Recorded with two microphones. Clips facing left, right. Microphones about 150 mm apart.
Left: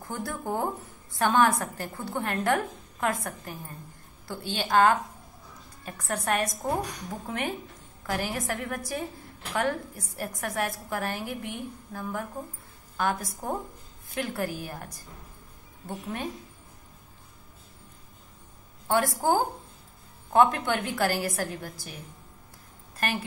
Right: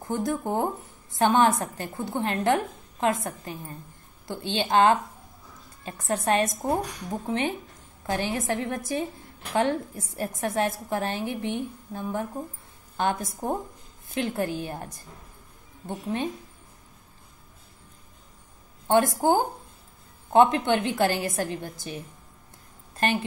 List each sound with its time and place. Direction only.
0.1 s a woman's voice: 20° right (ahead or behind)
18.9 s a woman's voice: 20° right (ahead or behind)